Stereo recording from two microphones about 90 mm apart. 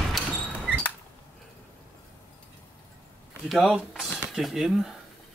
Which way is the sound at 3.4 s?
5° right (ahead or behind).